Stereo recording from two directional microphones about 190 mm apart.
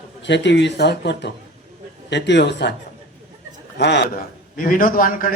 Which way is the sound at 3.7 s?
65° left (ahead or behind).